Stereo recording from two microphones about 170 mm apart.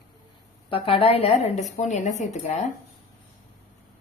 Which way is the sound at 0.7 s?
30° left (ahead or behind).